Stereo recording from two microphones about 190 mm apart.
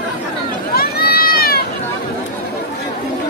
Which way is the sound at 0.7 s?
55° left (ahead or behind).